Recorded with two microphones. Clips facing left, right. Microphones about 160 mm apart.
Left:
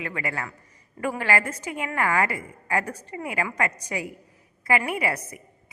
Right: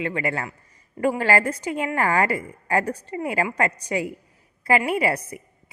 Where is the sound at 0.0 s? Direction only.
30° right (ahead or behind).